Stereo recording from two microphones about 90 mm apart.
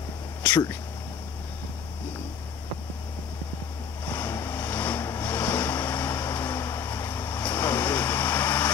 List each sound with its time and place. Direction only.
4.0 s vehicle: 20° left (ahead or behind)